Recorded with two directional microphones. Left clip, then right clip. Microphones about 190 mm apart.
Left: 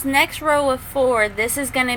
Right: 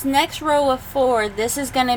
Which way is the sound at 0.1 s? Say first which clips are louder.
Left 1 dB; 20° right (ahead or behind).